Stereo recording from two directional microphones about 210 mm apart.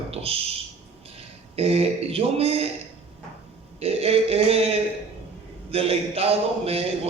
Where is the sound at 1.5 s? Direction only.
30° right (ahead or behind).